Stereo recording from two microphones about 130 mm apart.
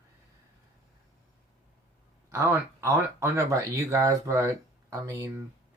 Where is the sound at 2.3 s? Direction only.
20° right (ahead or behind).